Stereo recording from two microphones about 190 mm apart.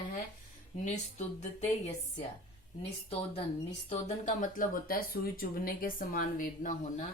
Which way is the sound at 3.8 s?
40° left (ahead or behind).